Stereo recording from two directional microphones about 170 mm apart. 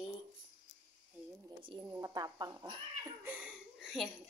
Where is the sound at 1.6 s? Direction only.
30° right (ahead or behind).